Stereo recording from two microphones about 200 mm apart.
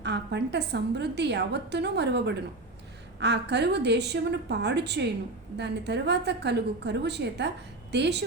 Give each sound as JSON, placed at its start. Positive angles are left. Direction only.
{"t": 0.0, "sound": "a woman's voice", "side_deg": -60}